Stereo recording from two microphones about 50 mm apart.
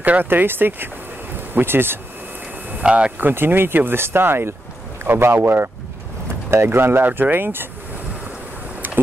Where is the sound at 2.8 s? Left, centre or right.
Right.